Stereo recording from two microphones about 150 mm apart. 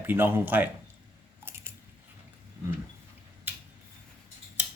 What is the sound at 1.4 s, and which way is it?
Biting, 15° right (ahead or behind).